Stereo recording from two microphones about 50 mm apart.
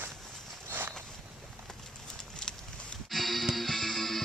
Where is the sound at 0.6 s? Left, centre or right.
Right.